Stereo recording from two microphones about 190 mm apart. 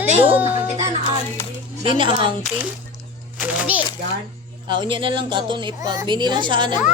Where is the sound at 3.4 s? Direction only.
5° right (ahead or behind).